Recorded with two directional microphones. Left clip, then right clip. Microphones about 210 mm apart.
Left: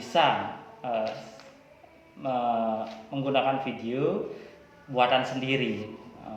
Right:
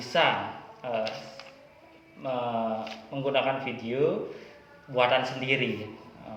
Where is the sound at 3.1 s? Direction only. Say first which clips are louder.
Left 1 dB; 20° right (ahead or behind).